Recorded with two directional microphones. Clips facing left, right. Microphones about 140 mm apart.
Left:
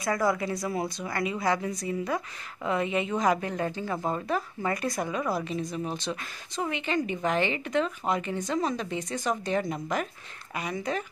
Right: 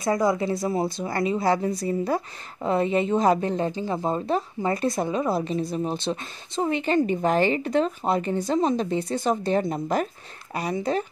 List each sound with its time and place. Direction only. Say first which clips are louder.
0.0 s speech: right 4 dB; 20° right (ahead or behind)